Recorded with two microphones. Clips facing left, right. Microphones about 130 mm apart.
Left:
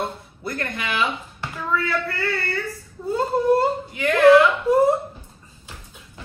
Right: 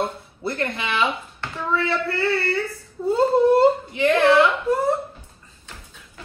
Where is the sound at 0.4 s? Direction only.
25° right (ahead or behind).